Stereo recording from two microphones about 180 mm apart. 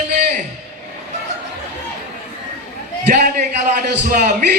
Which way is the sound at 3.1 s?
50° right (ahead or behind).